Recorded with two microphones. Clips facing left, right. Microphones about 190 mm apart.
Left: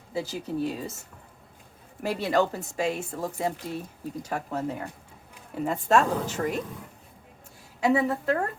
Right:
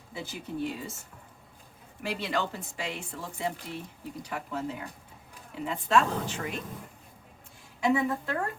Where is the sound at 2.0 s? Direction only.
45° left (ahead or behind).